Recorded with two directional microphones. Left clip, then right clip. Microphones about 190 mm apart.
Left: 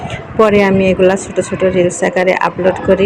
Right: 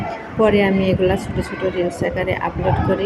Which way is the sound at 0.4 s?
20° left (ahead or behind).